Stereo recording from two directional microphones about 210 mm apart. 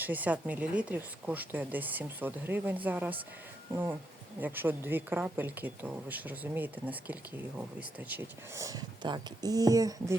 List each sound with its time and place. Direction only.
0.0 s speech: 10° right (ahead or behind)
4.4 s speech: 10° right (ahead or behind)